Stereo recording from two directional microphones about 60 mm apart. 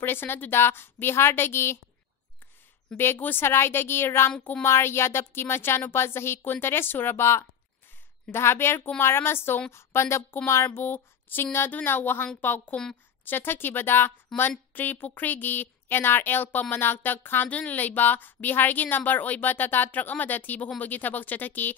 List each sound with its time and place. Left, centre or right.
0.0 s a woman's voice: left
3.0 s a woman's voice: left
10.8 s a sound: left
11.5 s a woman's voice: left
17.5 s a woman's voice: left